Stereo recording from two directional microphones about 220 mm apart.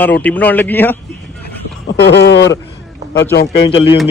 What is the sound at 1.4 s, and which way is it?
A man's voice, 50° left (ahead or behind).